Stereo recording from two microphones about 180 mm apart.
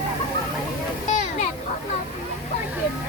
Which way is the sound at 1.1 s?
45° left (ahead or behind).